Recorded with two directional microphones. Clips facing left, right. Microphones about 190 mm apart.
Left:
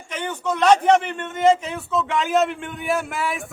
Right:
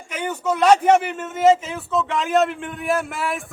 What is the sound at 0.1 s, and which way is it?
A man's voice, 10° right (ahead or behind).